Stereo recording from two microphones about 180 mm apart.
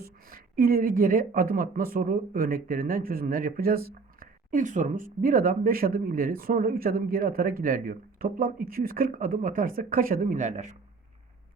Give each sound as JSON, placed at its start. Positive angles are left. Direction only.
{"t": 0.0, "sound": "speech", "side_deg": -55}